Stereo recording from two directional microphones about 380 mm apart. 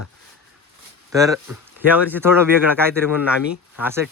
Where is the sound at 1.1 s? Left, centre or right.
Centre.